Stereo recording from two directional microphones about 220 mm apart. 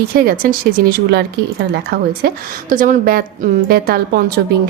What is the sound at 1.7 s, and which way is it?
A woman's voice, 45° right (ahead or behind).